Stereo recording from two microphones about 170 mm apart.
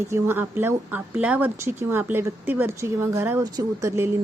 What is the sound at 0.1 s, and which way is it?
A woman's voice, 15° right (ahead or behind).